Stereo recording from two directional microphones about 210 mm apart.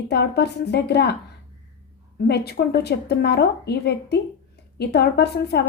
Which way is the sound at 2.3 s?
50° left (ahead or behind).